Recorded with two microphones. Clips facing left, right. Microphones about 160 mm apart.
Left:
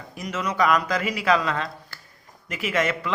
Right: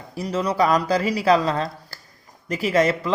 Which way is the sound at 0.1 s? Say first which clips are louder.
Right 5 dB; 35° right (ahead or behind).